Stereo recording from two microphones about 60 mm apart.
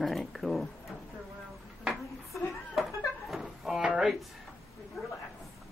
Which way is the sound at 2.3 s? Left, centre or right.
Centre.